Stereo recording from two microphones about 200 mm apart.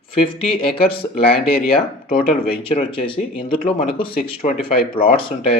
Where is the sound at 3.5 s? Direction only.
30° left (ahead or behind).